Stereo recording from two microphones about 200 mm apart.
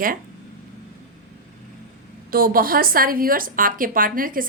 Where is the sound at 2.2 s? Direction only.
45° right (ahead or behind).